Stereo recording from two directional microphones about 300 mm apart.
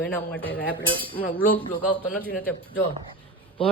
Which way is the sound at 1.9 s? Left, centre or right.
Centre.